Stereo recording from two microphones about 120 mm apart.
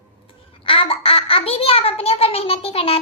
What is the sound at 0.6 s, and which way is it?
A child's voice, 50° left (ahead or behind).